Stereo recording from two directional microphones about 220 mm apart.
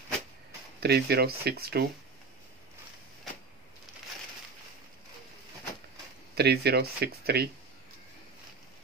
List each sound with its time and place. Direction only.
0.7 s speech: 45° right (ahead or behind)
6.3 s speech: 45° right (ahead or behind)